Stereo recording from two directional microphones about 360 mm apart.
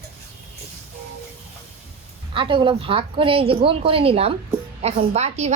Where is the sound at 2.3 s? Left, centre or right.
Centre.